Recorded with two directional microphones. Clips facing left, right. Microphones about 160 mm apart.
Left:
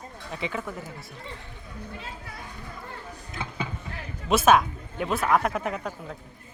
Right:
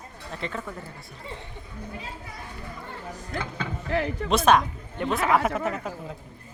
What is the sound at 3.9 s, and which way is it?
Speech, 90° right.